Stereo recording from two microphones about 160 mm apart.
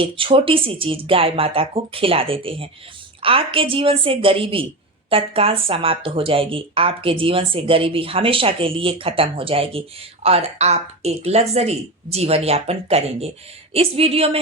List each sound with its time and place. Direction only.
0.0 s speech: 35° right (ahead or behind)